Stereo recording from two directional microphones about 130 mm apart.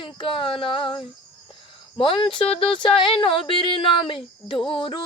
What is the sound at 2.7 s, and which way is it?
Speech, 40° left (ahead or behind).